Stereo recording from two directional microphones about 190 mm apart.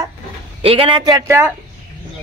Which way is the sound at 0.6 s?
30° right (ahead or behind).